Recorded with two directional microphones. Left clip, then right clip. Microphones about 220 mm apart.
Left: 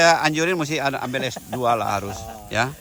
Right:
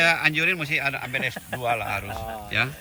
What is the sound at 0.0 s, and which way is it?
Speech, 10° left (ahead or behind).